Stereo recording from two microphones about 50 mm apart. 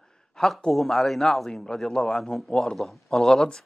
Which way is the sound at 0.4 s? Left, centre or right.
Centre.